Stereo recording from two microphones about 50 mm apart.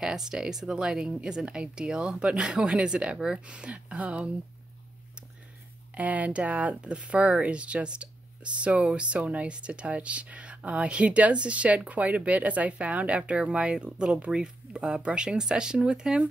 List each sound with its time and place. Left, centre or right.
0.0 s speech: centre
5.9 s speech: right; by 16.3 s centre